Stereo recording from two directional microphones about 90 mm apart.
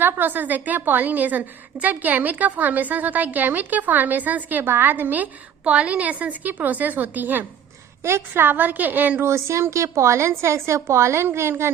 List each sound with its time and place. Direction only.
0.0 s a woman's voice: 20° right (ahead or behind)